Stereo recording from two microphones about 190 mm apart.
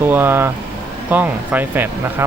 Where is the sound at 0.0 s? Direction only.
10° right (ahead or behind).